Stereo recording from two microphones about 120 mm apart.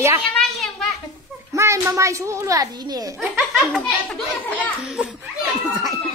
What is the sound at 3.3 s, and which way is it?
Speech, 5° right (ahead or behind).